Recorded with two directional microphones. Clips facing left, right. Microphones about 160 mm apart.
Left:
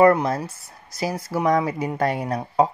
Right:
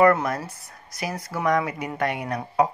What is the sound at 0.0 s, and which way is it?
Speech, 25° left (ahead or behind).